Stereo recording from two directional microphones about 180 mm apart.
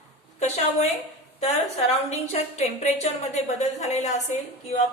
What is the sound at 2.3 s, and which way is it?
A woman's voice, 40° left (ahead or behind).